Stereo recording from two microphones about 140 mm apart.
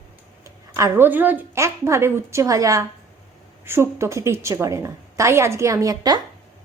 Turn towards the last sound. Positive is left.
turn(degrees=-25)  # may be behind; listen again after turning